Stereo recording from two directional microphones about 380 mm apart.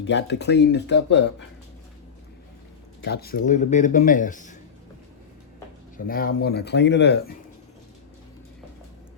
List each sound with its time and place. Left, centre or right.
0.0 s speech: left
3.0 s speech: left
6.1 s speech: left